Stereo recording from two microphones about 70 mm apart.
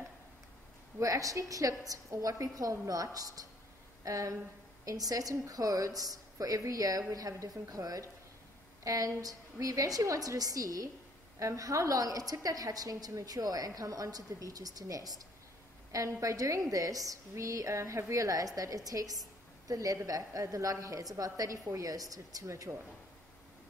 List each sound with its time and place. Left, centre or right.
0.9 s a woman's voice: right